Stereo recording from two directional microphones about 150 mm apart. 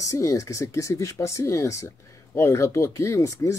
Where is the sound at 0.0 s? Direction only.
20° left (ahead or behind).